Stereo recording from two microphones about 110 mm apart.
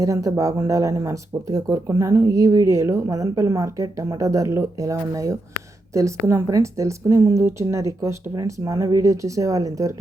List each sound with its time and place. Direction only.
0.0 s speech: 30° right (ahead or behind)